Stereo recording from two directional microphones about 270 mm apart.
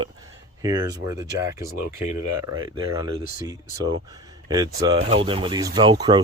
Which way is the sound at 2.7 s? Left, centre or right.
Centre.